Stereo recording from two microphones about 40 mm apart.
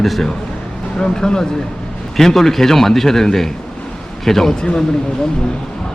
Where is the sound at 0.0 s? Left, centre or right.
Centre.